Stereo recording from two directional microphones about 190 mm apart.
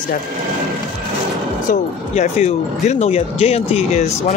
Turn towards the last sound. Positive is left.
turn(degrees=35)  # may be behind; listen again after turning